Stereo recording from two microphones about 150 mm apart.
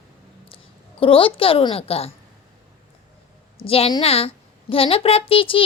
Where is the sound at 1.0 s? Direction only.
35° left (ahead or behind).